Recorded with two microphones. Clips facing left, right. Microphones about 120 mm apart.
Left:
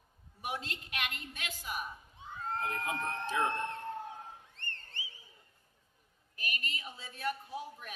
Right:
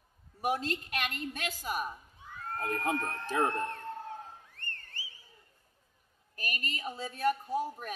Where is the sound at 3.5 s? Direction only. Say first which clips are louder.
Right 2 dB; 55° right (ahead or behind).